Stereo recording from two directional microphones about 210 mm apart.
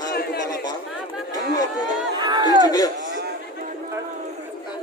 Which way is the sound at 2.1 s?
20° right (ahead or behind).